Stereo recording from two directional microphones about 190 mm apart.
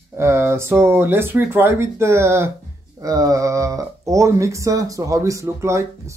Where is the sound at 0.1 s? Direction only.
15° right (ahead or behind).